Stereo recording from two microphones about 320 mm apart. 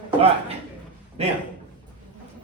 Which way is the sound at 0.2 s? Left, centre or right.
Centre.